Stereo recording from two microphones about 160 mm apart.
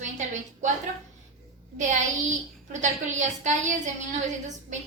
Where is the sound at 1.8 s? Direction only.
50° right (ahead or behind).